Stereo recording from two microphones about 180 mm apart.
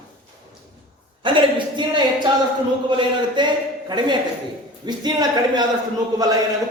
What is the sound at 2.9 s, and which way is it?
A man's voice, 25° right (ahead or behind).